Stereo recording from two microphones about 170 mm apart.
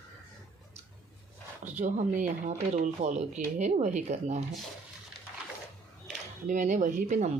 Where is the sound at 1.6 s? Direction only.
50° right (ahead or behind).